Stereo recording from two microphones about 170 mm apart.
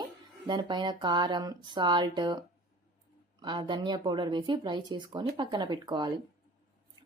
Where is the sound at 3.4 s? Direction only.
25° right (ahead or behind).